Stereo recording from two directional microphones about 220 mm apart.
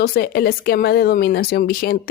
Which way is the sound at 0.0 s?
45° left (ahead or behind).